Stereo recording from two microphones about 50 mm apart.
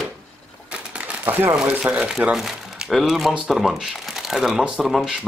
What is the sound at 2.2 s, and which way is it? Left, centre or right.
Speech, right.